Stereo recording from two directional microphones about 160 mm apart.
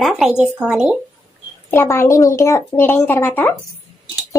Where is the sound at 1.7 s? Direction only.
15° left (ahead or behind).